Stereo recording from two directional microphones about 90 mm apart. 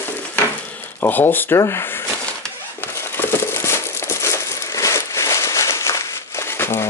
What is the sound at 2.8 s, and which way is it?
Crumpling, 30° left (ahead or behind).